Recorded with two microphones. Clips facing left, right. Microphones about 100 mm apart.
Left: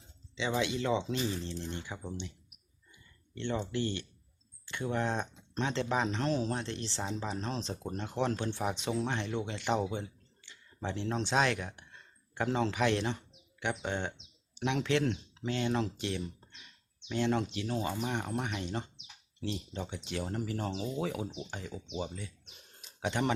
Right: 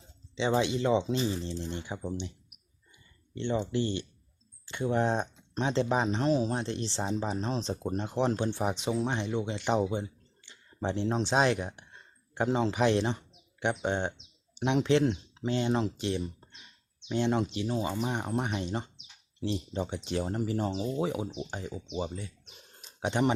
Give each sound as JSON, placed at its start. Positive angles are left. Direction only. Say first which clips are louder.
{"t": 0.3, "sound": "speech", "louder": "right 5 dB", "side_deg": -30}
{"t": 3.3, "sound": "speech", "louder": "right 4 dB", "side_deg": -15}
{"t": 22.8, "sound": "a sound", "louder": "right 4 dB", "side_deg": -25}